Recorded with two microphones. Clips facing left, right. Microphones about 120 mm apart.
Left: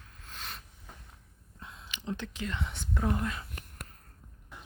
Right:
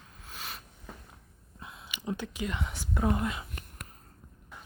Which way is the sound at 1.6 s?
10° right (ahead or behind).